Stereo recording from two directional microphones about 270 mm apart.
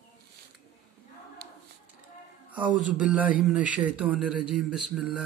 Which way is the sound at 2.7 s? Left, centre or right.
Centre.